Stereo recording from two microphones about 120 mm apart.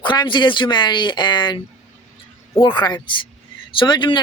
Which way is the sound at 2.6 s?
40° left (ahead or behind).